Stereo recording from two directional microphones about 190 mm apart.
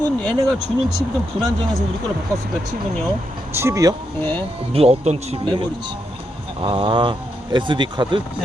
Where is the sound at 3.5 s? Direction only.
15° right (ahead or behind).